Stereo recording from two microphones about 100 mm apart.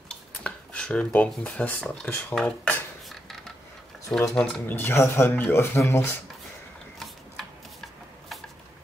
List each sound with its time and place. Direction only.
0.4 s a sound: 10° left (ahead or behind)
1.4 s speech: 15° left (ahead or behind)
2.4 s dishes: 5° left (ahead or behind)
4.3 s speech: 5° left (ahead or behind)
4.6 s speech: 20° left (ahead or behind)
7.0 s shuffling cards: centre (ahead or behind)